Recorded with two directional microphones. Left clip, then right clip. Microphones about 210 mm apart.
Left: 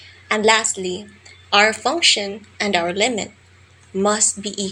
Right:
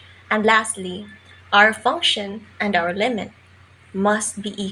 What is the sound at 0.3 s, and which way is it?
A woman's voice, 25° left (ahead or behind).